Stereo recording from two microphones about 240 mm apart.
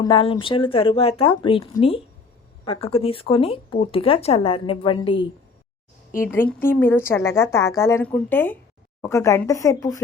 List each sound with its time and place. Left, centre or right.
0.0 s speech: left
6.1 s a woman's voice: centre